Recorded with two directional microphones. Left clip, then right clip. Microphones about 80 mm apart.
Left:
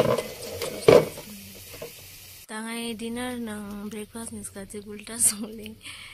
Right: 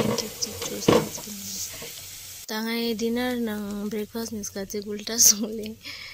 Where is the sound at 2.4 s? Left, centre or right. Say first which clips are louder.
Right 6 dB; right.